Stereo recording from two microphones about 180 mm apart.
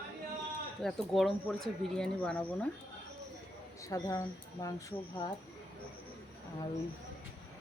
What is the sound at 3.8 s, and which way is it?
Speech, 20° left (ahead or behind).